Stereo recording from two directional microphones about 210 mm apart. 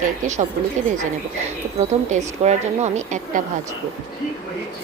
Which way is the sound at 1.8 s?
30° right (ahead or behind).